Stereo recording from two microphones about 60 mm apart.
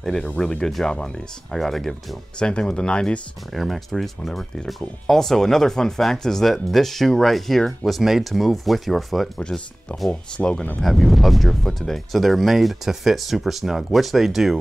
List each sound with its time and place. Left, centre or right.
0.0 s speech: centre
0.9 s speech: centre
1.5 s speech: centre
3.5 s speech: centre
9.4 s speech: centre
10.8 s speech: centre